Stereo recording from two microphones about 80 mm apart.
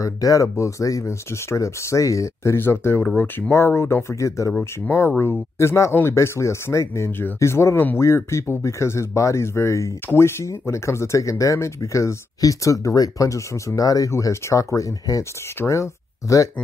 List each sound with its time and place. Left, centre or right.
0.0 s speech: left
4.5 s speech: left
7.1 s speech: left
7.3 s speech: left